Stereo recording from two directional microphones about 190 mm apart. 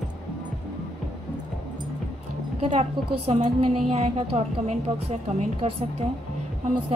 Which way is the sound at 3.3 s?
35° right (ahead or behind).